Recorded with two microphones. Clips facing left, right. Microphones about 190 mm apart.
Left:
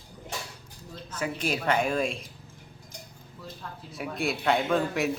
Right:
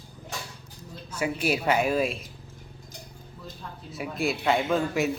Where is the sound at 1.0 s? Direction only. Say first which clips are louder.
Right 3 dB; 10° right (ahead or behind).